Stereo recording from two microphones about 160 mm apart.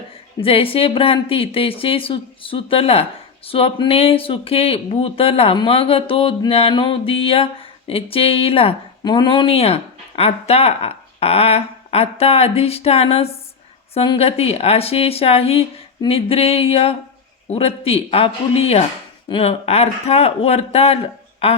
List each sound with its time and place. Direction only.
0.3 s a woman's voice: 35° left (ahead or behind)